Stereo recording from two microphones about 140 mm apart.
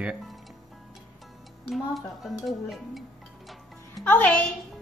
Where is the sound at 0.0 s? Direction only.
5° right (ahead or behind).